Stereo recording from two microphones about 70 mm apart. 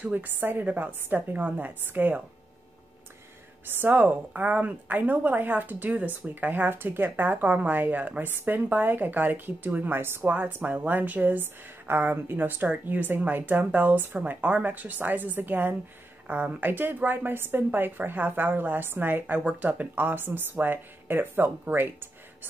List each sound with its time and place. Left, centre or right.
0.1 s a woman's voice: right
3.7 s a woman's voice: right